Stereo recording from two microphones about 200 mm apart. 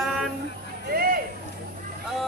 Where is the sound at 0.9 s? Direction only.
50° right (ahead or behind).